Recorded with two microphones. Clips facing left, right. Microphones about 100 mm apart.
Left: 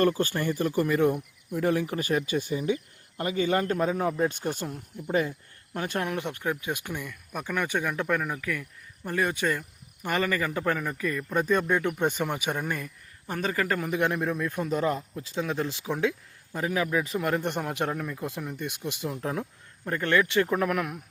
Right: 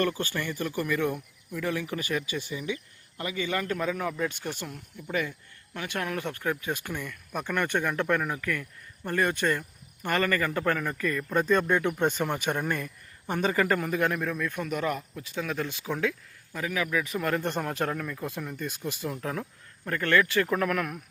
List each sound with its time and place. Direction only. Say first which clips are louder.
0.2 s speech: left 5 dB; 40° left (ahead or behind)
4.7 s a man's voice: left 4 dB; 25° left (ahead or behind)
5.7 s speech: left 3 dB; 40° left (ahead or behind)
6.1 s speech: left 1 dB; 20° left (ahead or behind); by 13.8 s centre (ahead or behind)
13.8 s a man's voice: left 1 dB; 20° left (ahead or behind)
17.2 s a man's voice: left 1 dB; 15° left (ahead or behind)